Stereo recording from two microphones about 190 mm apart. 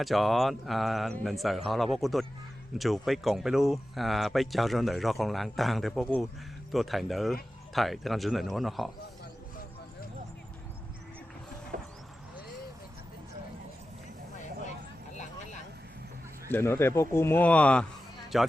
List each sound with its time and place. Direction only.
0.0 s speech: centre (ahead or behind)
11.7 s a sound: 45° right (ahead or behind)
16.5 s speech: 10° left (ahead or behind)